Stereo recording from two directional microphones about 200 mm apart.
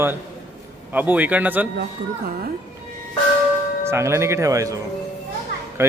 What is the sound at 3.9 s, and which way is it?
Speech, 15° right (ahead or behind).